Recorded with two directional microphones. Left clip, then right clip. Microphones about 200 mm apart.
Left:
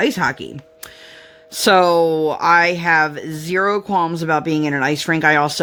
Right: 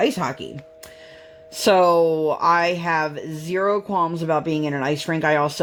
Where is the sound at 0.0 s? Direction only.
35° left (ahead or behind).